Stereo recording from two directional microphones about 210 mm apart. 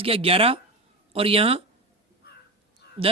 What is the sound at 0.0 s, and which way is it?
A man's voice, 25° right (ahead or behind).